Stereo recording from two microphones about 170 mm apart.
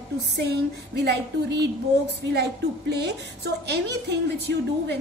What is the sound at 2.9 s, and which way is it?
A woman's voice, 80° right.